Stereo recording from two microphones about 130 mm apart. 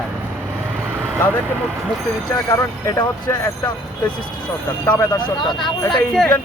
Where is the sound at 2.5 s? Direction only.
25° left (ahead or behind).